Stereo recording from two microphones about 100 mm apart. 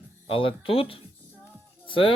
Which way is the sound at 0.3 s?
60° left (ahead or behind).